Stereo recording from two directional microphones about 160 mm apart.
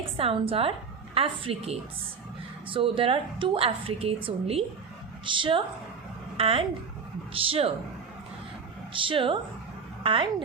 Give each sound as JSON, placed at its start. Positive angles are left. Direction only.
{"t": 0.2, "sound": "a woman's voice", "side_deg": -35}
{"t": 8.9, "sound": "a woman's voice", "side_deg": -35}